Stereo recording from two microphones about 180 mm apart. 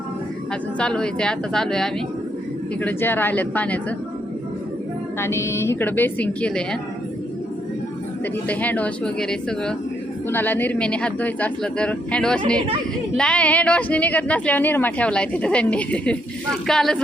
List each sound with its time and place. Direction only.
0.8 s a woman's voice: 5° left (ahead or behind)
5.2 s a woman's voice: 15° left (ahead or behind)
8.2 s a woman's voice: 10° left (ahead or behind)